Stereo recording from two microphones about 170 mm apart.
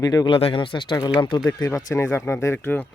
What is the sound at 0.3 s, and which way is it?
Speech, 30° left (ahead or behind).